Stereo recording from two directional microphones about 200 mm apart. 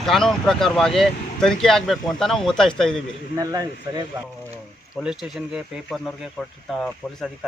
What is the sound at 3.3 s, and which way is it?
Speech, 15° right (ahead or behind).